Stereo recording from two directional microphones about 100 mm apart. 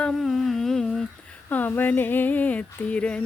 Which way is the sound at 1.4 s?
15° left (ahead or behind).